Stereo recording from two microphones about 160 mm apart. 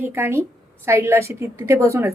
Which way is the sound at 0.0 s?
15° right (ahead or behind).